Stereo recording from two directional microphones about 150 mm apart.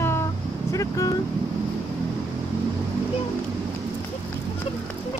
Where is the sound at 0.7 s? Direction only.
20° left (ahead or behind).